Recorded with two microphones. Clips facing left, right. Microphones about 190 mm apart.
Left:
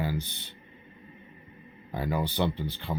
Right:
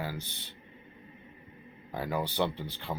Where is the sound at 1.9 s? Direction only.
Centre (ahead or behind).